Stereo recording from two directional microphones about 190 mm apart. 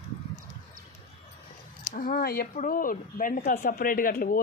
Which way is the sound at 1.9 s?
45° left (ahead or behind).